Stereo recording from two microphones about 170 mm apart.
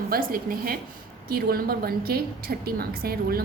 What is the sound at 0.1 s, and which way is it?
A woman's voice, 60° right (ahead or behind).